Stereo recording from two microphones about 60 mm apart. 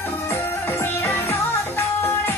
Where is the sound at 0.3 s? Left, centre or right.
Left.